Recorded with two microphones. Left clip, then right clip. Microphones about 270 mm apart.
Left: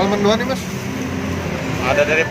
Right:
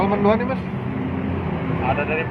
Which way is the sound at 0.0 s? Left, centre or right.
Left.